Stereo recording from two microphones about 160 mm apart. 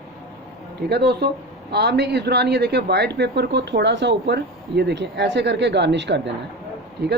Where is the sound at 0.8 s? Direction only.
90° right.